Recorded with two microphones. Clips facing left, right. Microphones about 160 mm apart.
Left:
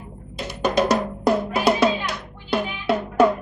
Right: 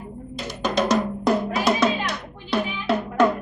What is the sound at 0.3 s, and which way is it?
Music, 10° left (ahead or behind).